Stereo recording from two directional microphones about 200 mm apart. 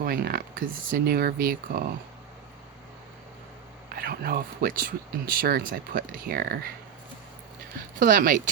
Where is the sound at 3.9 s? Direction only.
50° right (ahead or behind).